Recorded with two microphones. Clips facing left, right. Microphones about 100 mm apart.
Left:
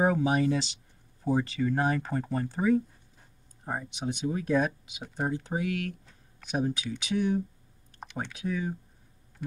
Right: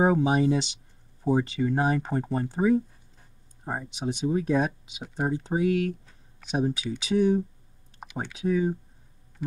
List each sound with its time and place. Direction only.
0.0 s speech: 20° right (ahead or behind)
5.0 s speech: 5° right (ahead or behind)
5.5 s speech: 25° right (ahead or behind)
8.0 s a sound: 5° right (ahead or behind)
8.5 s speech: 30° right (ahead or behind)